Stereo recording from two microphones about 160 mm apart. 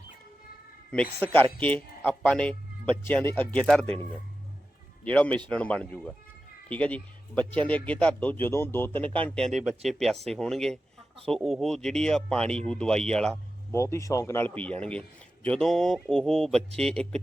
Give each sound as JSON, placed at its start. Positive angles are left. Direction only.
{"t": 0.9, "sound": "speech", "side_deg": 10}
{"t": 5.0, "sound": "speech", "side_deg": 10}
{"t": 13.7, "sound": "speech", "side_deg": 15}